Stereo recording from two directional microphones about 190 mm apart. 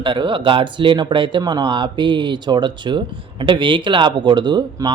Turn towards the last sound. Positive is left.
turn(degrees=-25)  # may be behind; listen again after turning